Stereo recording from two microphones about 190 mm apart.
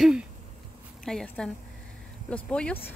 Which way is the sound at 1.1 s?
5° left (ahead or behind).